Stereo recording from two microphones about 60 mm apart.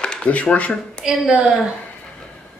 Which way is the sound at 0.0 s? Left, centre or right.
Centre.